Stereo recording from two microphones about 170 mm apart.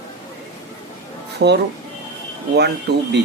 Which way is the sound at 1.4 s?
90° right.